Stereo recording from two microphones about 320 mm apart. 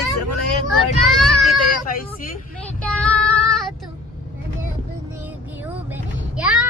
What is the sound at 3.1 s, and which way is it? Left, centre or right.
Child singing, centre.